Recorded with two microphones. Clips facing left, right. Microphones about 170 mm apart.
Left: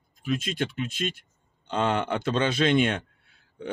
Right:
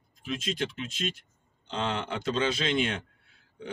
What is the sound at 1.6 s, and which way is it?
Speech, 55° left (ahead or behind).